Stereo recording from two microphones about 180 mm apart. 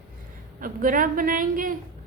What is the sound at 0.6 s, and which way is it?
A woman's voice, 50° right (ahead or behind).